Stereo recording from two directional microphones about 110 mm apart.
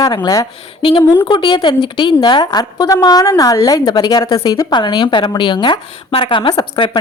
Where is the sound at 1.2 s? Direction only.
50° left (ahead or behind).